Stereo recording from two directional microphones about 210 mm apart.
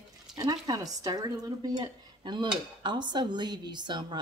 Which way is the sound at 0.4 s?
15° right (ahead or behind).